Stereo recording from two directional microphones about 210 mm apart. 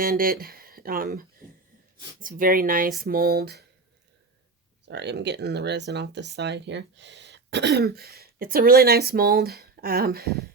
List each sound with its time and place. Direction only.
0.0 s speech: 45° right (ahead or behind)
2.2 s speech: 40° right (ahead or behind)
4.9 s speech: 55° right (ahead or behind)